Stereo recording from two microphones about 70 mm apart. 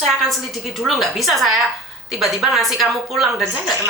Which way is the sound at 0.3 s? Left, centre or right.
Centre.